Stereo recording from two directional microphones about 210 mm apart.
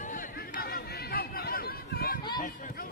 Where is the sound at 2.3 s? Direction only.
40° left (ahead or behind).